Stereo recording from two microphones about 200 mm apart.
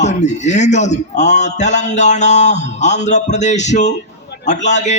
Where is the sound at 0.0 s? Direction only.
35° left (ahead or behind).